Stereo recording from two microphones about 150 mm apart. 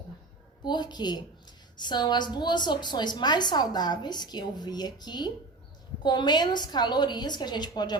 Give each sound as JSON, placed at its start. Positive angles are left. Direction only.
{"t": 0.6, "sound": "a woman's voice", "side_deg": 30}